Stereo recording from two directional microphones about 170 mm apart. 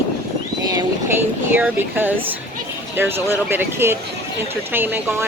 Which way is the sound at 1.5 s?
10° right (ahead or behind).